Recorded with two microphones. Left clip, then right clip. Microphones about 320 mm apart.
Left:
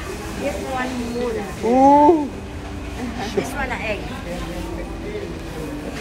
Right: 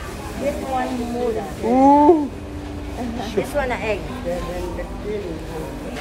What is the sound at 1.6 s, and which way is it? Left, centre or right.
Speech, centre.